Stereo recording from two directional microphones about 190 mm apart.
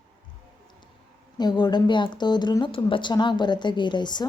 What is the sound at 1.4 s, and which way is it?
A woman's voice, 20° left (ahead or behind).